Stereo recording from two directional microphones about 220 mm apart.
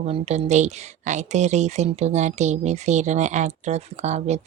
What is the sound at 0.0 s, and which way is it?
Speech, 30° right (ahead or behind).